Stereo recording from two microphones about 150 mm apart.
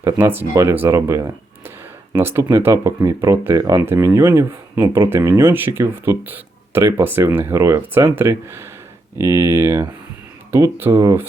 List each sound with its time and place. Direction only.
0.0 s speech: 15° right (ahead or behind)